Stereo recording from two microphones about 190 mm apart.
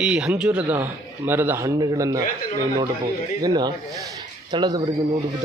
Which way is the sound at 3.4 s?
20° right (ahead or behind).